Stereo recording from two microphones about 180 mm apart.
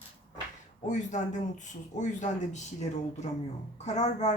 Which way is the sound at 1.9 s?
40° left (ahead or behind).